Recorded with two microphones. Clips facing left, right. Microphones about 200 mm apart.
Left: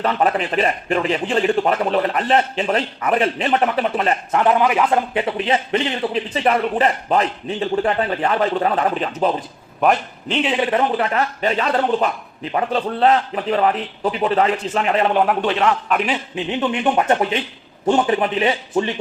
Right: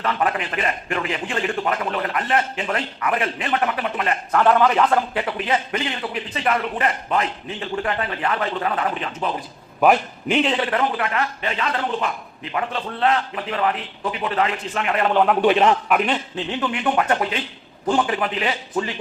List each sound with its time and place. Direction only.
0.0 s a man's voice: 35° left (ahead or behind)
4.4 s a man's voice: 15° left (ahead or behind); by 9.3 s 35° left (ahead or behind)
9.8 s a man's voice: 5° right (ahead or behind)
10.4 s a man's voice: 10° left (ahead or behind)
10.7 s a man's voice: 30° left (ahead or behind)
15.4 s a man's voice: 15° right (ahead or behind)
15.9 s a man's voice: centre (ahead or behind)
16.3 s speech: 20° left (ahead or behind)